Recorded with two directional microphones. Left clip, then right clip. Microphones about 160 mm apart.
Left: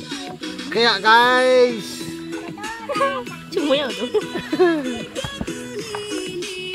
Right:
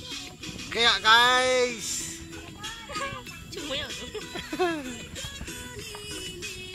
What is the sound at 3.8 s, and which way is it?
Speech, 35° left (ahead or behind).